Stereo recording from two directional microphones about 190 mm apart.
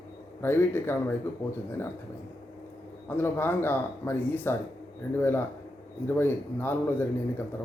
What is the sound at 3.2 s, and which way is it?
Speech, 10° left (ahead or behind).